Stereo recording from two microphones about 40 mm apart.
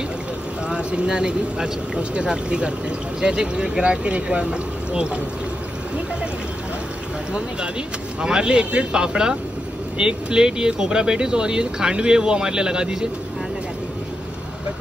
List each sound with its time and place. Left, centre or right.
0.7 s speech: right
8.2 s speech: right